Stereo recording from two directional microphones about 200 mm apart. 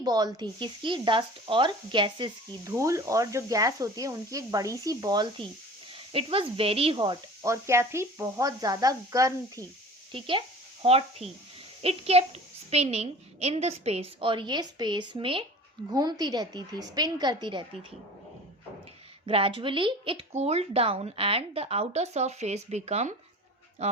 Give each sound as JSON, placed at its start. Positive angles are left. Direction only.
{"t": 0.0, "sound": "speech", "side_deg": -20}
{"t": 19.2, "sound": "speech", "side_deg": -25}